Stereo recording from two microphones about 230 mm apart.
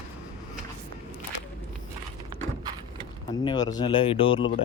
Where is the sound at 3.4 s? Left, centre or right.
Centre.